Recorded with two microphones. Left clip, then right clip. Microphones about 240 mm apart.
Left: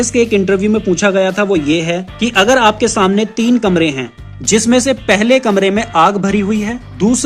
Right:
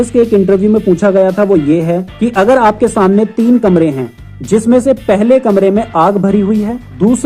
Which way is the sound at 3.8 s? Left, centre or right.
Centre.